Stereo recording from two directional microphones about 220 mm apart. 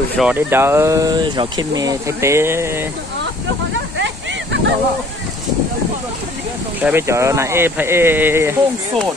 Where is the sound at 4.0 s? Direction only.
55° right (ahead or behind).